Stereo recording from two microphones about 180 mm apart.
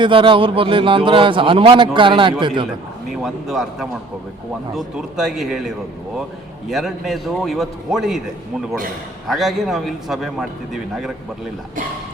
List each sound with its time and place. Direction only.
0.0 s a man's voice: 30° right (ahead or behind)
3.2 s a man's voice: centre (ahead or behind)
9.2 s a man's voice: centre (ahead or behind)